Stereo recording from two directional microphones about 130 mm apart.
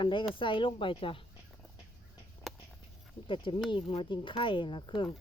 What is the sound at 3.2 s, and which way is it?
A child's voice, 40° left (ahead or behind).